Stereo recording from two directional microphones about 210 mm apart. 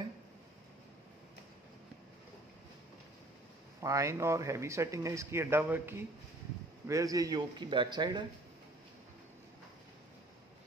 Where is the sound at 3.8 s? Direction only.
15° right (ahead or behind).